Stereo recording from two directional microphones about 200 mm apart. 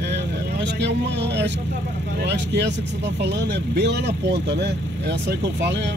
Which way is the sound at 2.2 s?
60° right (ahead or behind).